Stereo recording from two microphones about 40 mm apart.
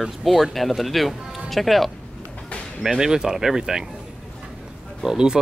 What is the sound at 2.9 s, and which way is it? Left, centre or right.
Speech, centre.